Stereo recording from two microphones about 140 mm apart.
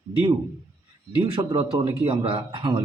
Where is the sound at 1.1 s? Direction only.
40° right (ahead or behind).